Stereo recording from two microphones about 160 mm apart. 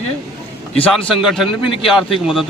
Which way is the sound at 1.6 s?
35° left (ahead or behind).